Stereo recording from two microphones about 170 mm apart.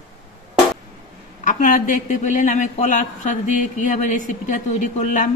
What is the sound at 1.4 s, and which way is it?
Speech, 50° left (ahead or behind).